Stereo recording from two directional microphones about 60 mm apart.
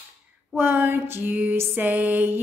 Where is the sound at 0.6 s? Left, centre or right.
Right.